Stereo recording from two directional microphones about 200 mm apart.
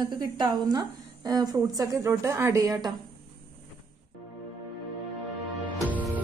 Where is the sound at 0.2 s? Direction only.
20° right (ahead or behind).